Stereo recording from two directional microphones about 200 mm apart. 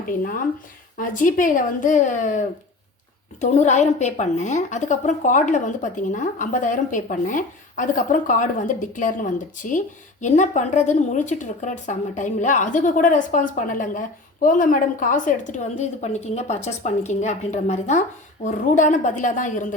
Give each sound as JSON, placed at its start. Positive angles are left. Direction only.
{"t": 0.2, "sound": "a woman's voice", "side_deg": 45}